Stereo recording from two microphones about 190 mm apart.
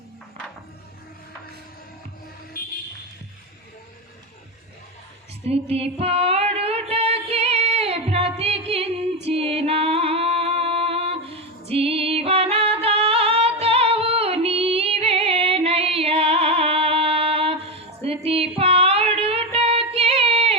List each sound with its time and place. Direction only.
2.5 s vehicle: 50° left (ahead or behind)
5.5 s music: 30° right (ahead or behind)